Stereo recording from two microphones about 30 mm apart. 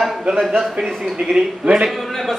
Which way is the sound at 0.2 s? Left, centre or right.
Right.